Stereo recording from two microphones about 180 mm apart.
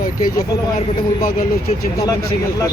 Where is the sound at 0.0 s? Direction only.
55° left (ahead or behind).